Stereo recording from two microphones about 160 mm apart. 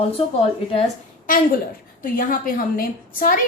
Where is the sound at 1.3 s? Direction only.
55° left (ahead or behind).